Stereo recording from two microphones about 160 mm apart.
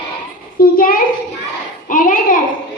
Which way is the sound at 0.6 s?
65° left (ahead or behind).